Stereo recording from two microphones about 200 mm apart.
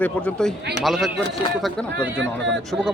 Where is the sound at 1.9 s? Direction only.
65° right (ahead or behind).